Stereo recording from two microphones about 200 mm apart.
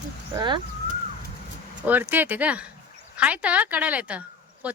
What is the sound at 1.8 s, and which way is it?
Speech, 10° right (ahead or behind).